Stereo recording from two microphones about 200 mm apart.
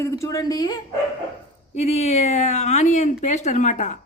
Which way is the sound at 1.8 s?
35° left (ahead or behind).